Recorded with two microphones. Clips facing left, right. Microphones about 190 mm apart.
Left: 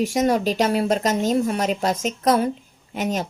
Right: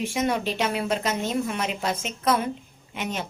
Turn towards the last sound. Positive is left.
turn(degrees=40)  # may be behind; listen again after turning